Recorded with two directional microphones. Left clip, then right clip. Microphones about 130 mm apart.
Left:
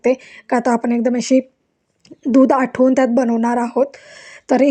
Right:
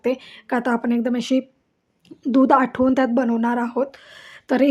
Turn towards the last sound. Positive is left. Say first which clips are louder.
# left 4 dB
turn(degrees=25)  # may be behind; listen again after turning